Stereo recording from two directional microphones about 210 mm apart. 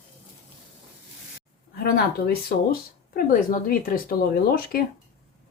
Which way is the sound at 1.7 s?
50° left (ahead or behind).